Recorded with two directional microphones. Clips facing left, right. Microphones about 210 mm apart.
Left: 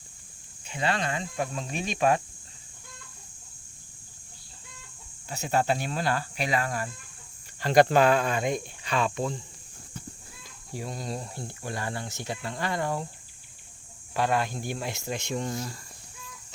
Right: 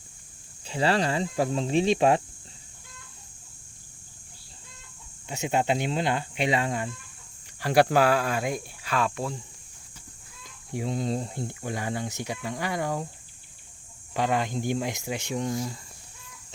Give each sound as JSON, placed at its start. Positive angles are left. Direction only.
{"t": 0.7, "sound": "speech", "side_deg": -30}
{"t": 5.3, "sound": "speech", "side_deg": -20}
{"t": 7.6, "sound": "speech", "side_deg": -10}
{"t": 10.8, "sound": "speech", "side_deg": -20}
{"t": 14.1, "sound": "speech", "side_deg": -15}